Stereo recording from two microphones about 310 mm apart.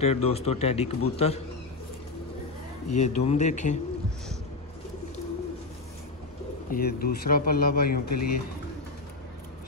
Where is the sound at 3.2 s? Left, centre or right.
Left.